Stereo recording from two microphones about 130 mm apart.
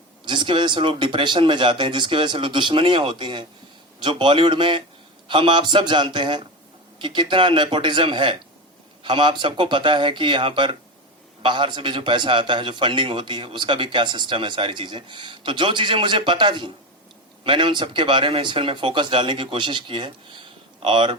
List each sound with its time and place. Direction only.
0.3 s a man's voice: 40° right (ahead or behind)